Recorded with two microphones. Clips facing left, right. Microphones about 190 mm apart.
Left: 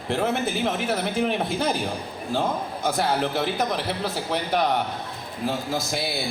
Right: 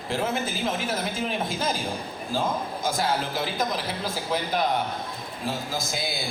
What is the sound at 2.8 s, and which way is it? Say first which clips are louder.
A man's voice: left 4 dB; 65° left (ahead or behind).